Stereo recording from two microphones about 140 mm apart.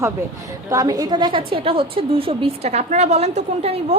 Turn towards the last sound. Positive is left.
turn(degrees=-50)  # may be behind; listen again after turning